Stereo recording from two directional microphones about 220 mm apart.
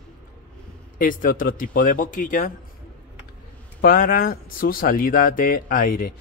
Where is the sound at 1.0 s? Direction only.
40° left (ahead or behind).